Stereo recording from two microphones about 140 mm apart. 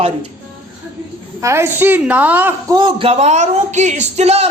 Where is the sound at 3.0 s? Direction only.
45° right (ahead or behind).